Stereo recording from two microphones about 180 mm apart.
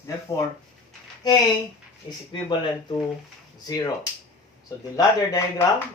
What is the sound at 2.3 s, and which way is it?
Speech, 25° left (ahead or behind).